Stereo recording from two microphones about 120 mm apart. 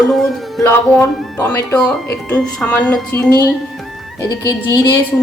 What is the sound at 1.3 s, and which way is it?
A woman's voice, 15° left (ahead or behind).